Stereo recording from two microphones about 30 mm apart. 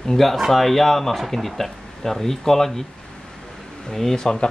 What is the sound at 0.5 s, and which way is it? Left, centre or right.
Speech, centre.